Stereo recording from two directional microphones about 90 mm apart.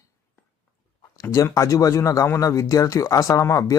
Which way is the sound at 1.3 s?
35° left (ahead or behind).